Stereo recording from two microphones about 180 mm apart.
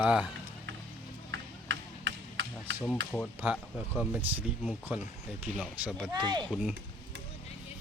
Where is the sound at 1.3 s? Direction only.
90° right.